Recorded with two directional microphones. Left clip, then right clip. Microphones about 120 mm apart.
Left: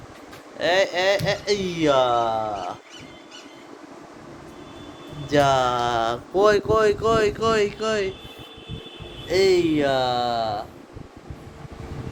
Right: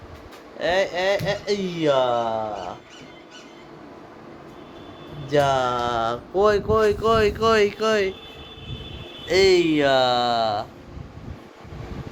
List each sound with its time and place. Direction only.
0.6 s speech: 50° left (ahead or behind)
5.3 s speech: 40° left (ahead or behind); by 8.1 s 5° right (ahead or behind)
9.2 s speech: 15° right (ahead or behind)